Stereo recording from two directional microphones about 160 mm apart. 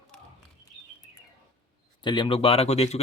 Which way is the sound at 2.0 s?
30° left (ahead or behind).